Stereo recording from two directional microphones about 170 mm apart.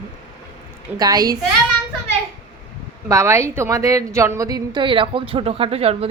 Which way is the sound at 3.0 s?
15° right (ahead or behind).